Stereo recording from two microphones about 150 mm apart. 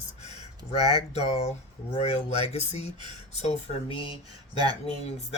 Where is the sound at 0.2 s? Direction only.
45° left (ahead or behind).